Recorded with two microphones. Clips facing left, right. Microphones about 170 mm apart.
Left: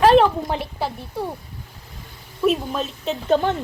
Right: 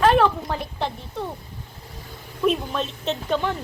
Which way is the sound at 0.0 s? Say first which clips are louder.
Left 4 dB; 30° left (ahead or behind).